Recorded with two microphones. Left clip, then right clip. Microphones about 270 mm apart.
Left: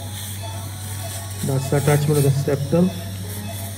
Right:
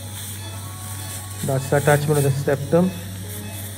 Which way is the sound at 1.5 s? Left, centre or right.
Right.